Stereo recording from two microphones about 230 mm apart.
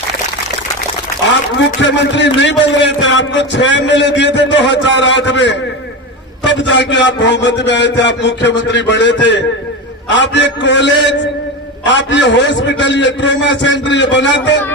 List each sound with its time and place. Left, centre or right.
1.5 s a man's voice: left